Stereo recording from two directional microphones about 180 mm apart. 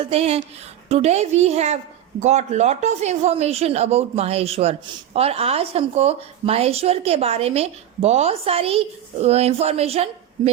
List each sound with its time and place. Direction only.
0.1 s speech: 35° right (ahead or behind)